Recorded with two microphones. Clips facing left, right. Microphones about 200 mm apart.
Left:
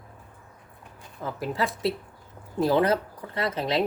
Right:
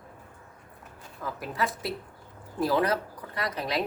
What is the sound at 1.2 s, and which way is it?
A woman's voice, 25° left (ahead or behind).